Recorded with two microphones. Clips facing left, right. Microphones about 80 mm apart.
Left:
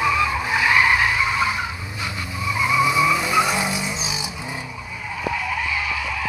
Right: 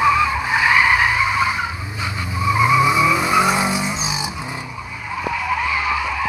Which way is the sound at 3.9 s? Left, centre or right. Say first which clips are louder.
Right 4 dB; right.